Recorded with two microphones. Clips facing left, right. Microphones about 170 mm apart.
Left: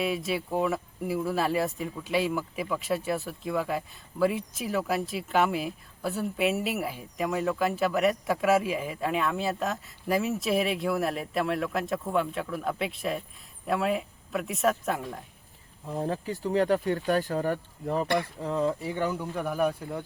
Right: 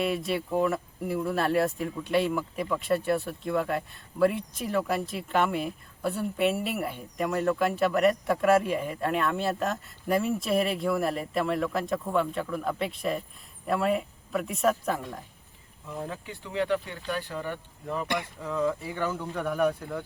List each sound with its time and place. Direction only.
0.0 s speech: centre (ahead or behind)
15.9 s speech: 35° left (ahead or behind)
18.9 s a man's voice: 15° left (ahead or behind)